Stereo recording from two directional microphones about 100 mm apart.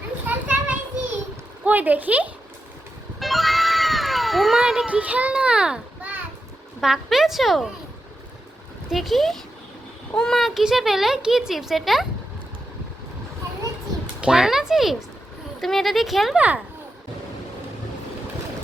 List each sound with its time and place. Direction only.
0.3 s children playing: 15° right (ahead or behind)
1.6 s speech: 15° right (ahead or behind)
3.2 s cat: centre (ahead or behind)
4.9 s a child's voice: 15° right (ahead or behind)
8.9 s speech: centre (ahead or behind)
14.2 s speech: 5° right (ahead or behind)